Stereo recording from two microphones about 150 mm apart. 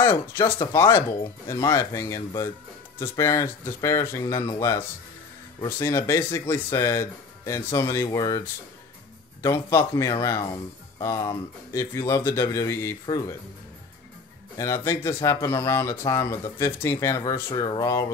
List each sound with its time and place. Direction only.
0.0 s speech: 15° left (ahead or behind)
14.6 s speech: 20° left (ahead or behind)